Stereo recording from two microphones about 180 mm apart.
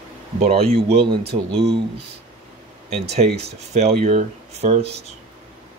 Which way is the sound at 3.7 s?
40° right (ahead or behind).